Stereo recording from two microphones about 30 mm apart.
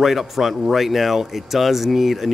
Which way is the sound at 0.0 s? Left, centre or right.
Centre.